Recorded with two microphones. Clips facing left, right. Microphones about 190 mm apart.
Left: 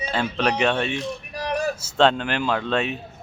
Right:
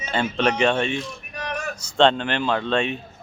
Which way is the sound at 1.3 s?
35° left (ahead or behind).